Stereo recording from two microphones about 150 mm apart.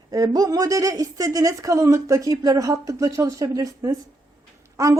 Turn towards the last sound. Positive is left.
turn(degrees=-20)  # may be behind; listen again after turning